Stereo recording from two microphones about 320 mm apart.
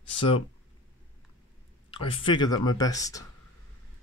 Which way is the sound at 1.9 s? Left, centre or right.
Centre.